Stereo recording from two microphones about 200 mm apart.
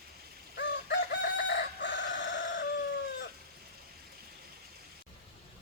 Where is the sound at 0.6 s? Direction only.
60° left (ahead or behind).